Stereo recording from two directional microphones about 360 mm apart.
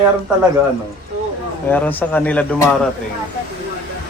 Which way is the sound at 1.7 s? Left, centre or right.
Centre.